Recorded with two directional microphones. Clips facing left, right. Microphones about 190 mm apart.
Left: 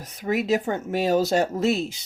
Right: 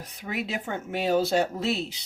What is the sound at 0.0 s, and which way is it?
Speech, 45° left (ahead or behind).